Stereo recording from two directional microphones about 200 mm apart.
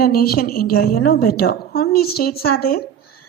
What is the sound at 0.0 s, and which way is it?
A woman's voice, 45° left (ahead or behind).